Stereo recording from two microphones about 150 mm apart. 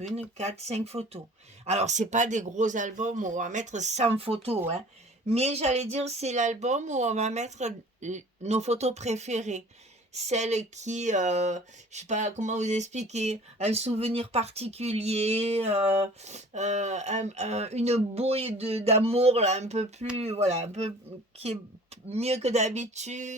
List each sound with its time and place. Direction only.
0.3 s speech: 45° right (ahead or behind)